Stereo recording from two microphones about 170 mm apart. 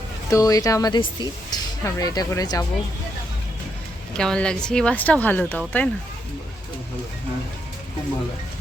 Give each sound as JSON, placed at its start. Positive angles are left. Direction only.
{"t": 0.3, "sound": "speech", "side_deg": 20}
{"t": 4.1, "sound": "speech", "side_deg": 5}